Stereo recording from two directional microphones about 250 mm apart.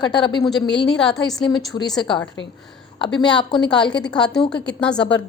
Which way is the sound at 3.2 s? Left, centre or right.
Centre.